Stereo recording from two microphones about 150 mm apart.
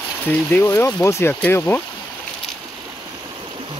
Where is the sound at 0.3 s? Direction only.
10° left (ahead or behind).